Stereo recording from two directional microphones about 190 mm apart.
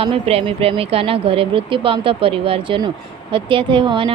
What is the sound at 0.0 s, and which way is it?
A woman's voice, 30° right (ahead or behind).